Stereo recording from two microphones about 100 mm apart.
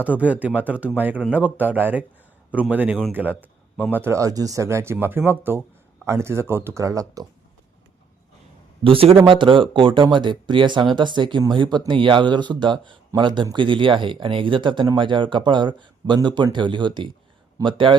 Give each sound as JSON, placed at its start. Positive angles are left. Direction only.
{"t": 0.0, "sound": "speech", "side_deg": -15}
{"t": 4.2, "sound": "speech", "side_deg": -35}
{"t": 8.8, "sound": "a man's voice", "side_deg": -70}